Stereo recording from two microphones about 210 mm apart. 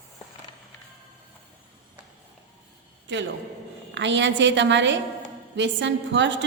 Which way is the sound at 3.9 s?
60° right (ahead or behind).